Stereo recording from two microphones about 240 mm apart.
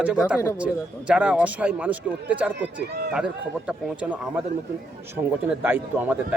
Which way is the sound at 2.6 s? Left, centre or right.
Right.